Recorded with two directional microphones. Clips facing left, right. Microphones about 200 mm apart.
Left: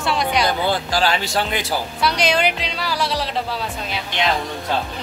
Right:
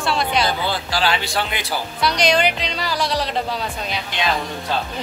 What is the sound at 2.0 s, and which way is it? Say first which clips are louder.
Speech: right 1 dB; 5° left (ahead or behind).